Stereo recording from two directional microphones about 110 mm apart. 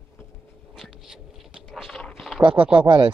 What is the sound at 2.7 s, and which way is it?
Speech, 50° right (ahead or behind).